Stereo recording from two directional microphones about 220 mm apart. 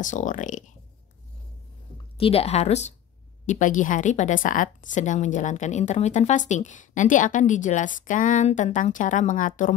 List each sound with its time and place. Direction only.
0.0 s a woman's voice: 35° left (ahead or behind)
2.1 s a woman's voice: 25° left (ahead or behind)